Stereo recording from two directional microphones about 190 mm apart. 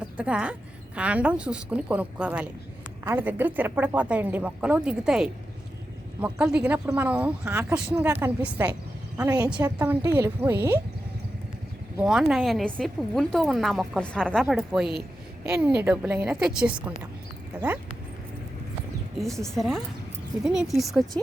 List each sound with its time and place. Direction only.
0.0 s a woman's voice: 5° right (ahead or behind)
12.0 s a woman's voice: centre (ahead or behind)
19.5 s speech: centre (ahead or behind)